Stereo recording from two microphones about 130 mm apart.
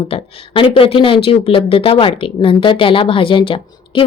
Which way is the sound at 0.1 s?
45° left (ahead or behind).